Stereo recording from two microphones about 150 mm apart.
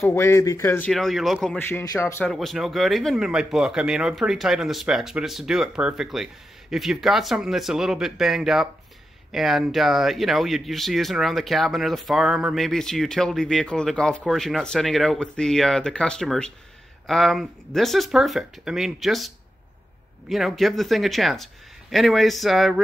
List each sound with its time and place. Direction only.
0.0 s speech: 15° left (ahead or behind)
0.9 s speech: centre (ahead or behind)
1.6 s speech: 15° left (ahead or behind)
2.2 s speech: centre (ahead or behind)